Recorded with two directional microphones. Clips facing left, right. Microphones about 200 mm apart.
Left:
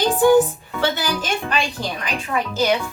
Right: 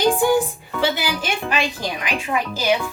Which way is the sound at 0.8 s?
10° right (ahead or behind).